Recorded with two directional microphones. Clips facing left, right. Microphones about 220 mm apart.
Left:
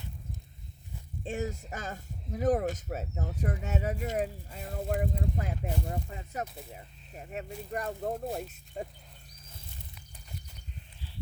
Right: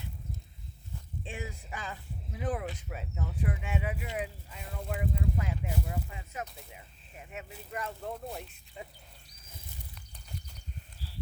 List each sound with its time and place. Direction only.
1.2 s speech: 45° left (ahead or behind)